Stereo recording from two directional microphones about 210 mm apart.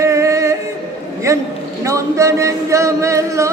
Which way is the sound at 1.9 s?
15° right (ahead or behind).